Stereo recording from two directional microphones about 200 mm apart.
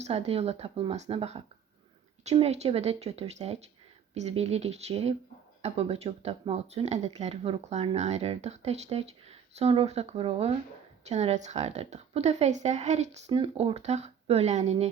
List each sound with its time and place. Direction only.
0.0 s speech: 30° right (ahead or behind)